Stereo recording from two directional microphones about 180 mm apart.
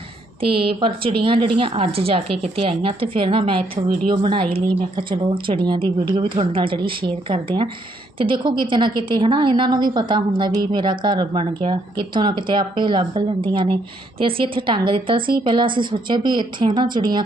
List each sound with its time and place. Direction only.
0.4 s a woman's voice: 30° right (ahead or behind)